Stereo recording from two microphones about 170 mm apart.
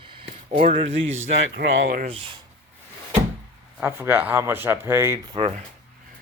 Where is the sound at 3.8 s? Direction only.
10° right (ahead or behind).